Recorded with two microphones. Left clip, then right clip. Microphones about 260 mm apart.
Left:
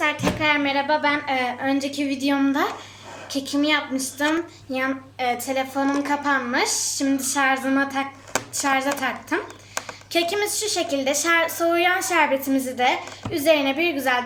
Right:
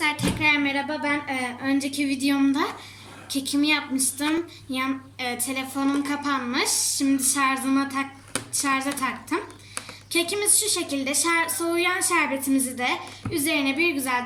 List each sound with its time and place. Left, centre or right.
0.0 s a woman's voice: centre
5.5 s a woman's voice: centre